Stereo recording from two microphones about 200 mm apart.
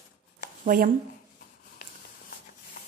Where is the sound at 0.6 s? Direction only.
45° right (ahead or behind).